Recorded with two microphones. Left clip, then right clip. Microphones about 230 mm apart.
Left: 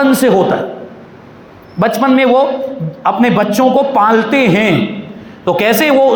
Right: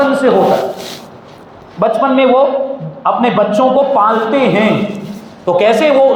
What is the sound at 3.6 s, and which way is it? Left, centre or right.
Speech, left.